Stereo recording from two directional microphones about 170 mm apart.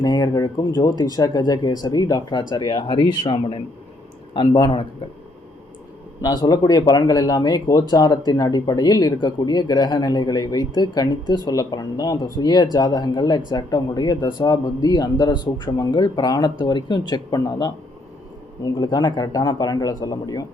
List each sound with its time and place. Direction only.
0.0 s speech: 20° left (ahead or behind)
6.2 s speech: 25° left (ahead or behind)